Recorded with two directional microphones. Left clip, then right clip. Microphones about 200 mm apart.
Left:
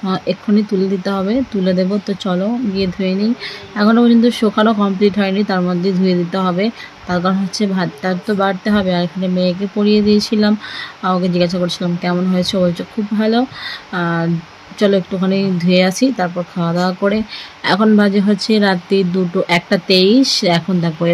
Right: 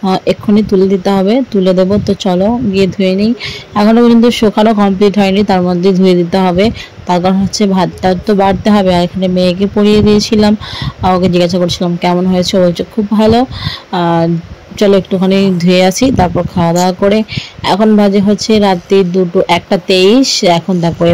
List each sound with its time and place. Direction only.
0.0 s speech: 25° right (ahead or behind)